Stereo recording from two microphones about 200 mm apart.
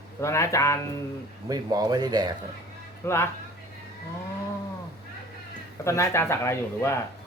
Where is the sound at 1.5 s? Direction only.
20° right (ahead or behind).